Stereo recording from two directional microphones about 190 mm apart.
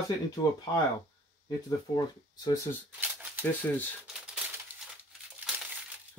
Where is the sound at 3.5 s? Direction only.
10° left (ahead or behind).